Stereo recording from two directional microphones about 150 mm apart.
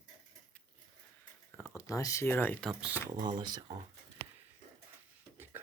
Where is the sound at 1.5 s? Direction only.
20° left (ahead or behind).